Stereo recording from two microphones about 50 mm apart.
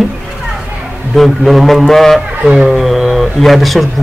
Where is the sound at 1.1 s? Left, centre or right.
Centre.